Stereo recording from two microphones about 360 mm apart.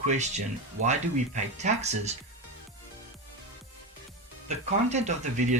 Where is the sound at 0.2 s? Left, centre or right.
Centre.